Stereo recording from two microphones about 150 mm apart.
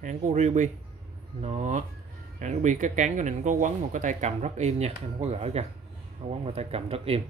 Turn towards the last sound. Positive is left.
turn(degrees=-40)  # may be behind; listen again after turning